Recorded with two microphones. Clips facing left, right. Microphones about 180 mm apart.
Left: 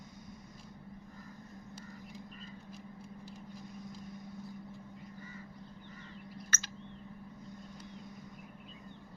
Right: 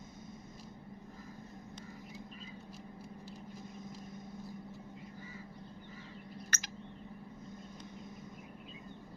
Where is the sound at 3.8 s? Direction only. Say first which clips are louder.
Left 1 dB; 20° right (ahead or behind).